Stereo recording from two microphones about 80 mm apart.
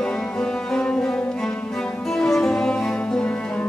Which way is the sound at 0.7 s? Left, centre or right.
Centre.